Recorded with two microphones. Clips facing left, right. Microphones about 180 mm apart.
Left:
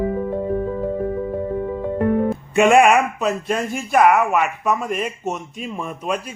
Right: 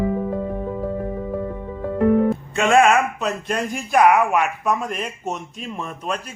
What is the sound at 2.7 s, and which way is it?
Speech, 15° left (ahead or behind).